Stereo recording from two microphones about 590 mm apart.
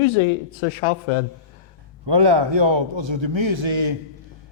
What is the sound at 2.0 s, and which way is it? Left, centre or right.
A man's voice, right.